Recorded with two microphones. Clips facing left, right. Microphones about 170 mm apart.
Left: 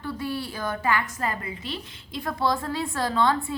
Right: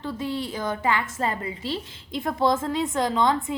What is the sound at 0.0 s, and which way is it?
A woman's voice, 20° right (ahead or behind).